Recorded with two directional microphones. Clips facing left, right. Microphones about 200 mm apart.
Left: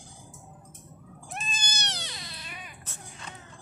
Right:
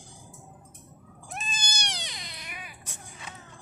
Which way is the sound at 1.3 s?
Centre (ahead or behind).